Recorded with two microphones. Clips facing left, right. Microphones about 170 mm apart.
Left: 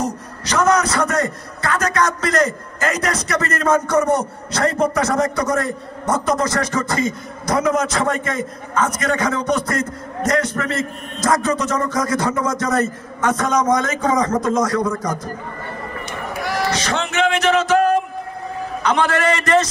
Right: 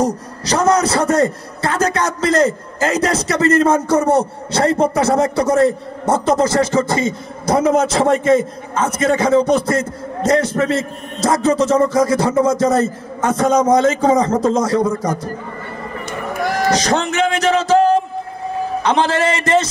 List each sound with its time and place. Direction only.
0.0 s a man's voice: 30° right (ahead or behind)
16.1 s a sound: 50° right (ahead or behind); by 18.0 s 30° right (ahead or behind)
18.8 s a man's voice: 25° right (ahead or behind)